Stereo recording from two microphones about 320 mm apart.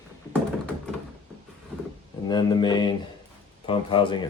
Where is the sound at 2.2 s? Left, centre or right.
Centre.